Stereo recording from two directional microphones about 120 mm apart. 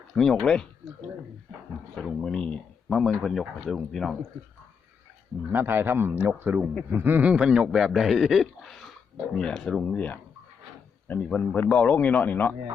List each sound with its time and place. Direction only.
0.1 s speech: 5° left (ahead or behind)
2.0 s speech: centre (ahead or behind)
5.5 s a man's voice: 15° right (ahead or behind); by 12.5 s 15° left (ahead or behind)